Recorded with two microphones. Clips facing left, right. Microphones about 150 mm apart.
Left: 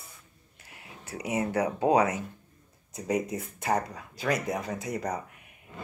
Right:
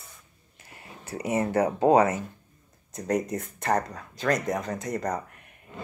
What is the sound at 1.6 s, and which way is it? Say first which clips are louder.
Speech: right 4 dB; 50° right (ahead or behind).